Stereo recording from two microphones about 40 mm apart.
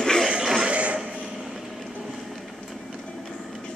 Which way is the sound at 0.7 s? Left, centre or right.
Right.